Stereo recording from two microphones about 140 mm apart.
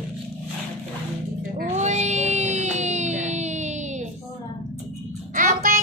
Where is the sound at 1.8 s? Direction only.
55° right (ahead or behind).